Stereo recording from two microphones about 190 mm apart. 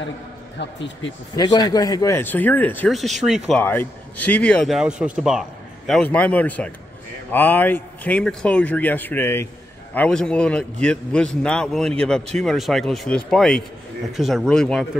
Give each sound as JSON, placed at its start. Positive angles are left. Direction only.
{"t": 0.6, "sound": "speech", "side_deg": 70}
{"t": 1.3, "sound": "speech", "side_deg": 20}
{"t": 3.6, "sound": "a man's voice", "side_deg": 10}